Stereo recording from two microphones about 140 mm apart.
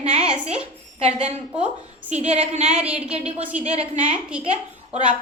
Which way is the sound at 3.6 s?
45° right (ahead or behind).